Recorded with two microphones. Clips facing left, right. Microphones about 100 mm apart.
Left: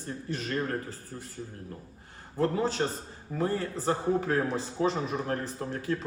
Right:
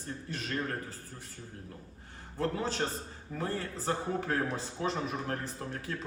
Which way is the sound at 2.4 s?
5° left (ahead or behind).